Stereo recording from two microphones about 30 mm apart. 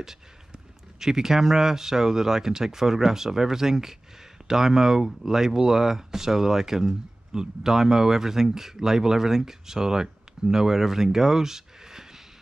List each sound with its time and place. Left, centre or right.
0.0 s speech: centre